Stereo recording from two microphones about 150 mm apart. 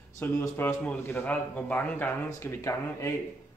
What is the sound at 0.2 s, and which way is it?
A man's voice, 15° left (ahead or behind).